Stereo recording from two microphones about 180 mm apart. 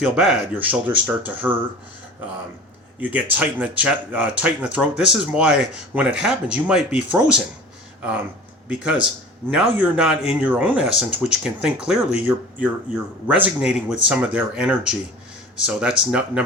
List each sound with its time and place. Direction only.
0.0 s speech: 5° right (ahead or behind)
3.0 s speech: 10° right (ahead or behind)
8.6 s speech: 5° right (ahead or behind)